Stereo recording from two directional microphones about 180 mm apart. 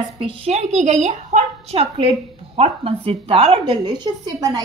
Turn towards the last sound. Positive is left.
turn(degrees=-20)  # may be behind; listen again after turning